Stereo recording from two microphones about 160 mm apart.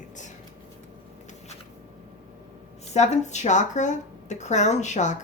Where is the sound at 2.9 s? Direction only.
45° left (ahead or behind).